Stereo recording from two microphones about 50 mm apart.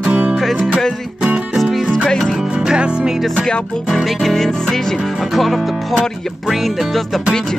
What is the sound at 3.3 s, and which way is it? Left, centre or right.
Music, centre.